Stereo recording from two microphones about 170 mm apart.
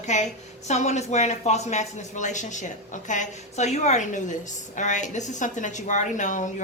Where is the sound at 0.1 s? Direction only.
45° left (ahead or behind).